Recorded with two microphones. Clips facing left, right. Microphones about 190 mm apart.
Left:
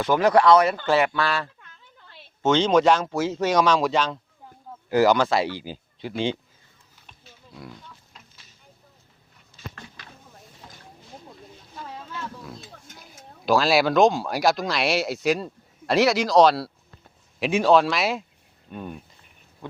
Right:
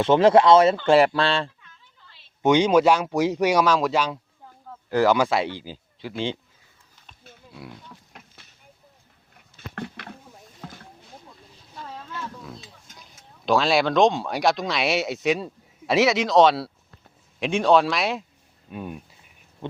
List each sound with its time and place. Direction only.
0.0 s speech: 25° right (ahead or behind)
2.4 s speech: 15° right (ahead or behind)
4.9 s speech: 5° left (ahead or behind)
5.1 s speech: 5° right (ahead or behind)
5.5 s speech: 10° left (ahead or behind)
7.9 s pig: 60° right (ahead or behind)
9.6 s patter: 60° right (ahead or behind)
11.7 s a sound: 5° left (ahead or behind)
13.0 s speech: 5° left (ahead or behind)